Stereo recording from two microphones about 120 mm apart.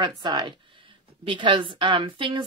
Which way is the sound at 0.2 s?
35° right (ahead or behind).